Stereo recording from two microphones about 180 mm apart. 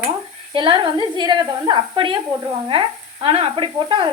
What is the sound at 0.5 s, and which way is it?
A woman's voice, 30° right (ahead or behind).